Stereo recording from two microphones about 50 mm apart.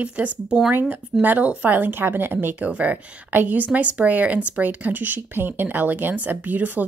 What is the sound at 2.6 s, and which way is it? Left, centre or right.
Speech, right.